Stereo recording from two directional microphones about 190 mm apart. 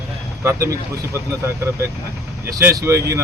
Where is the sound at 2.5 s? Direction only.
15° right (ahead or behind).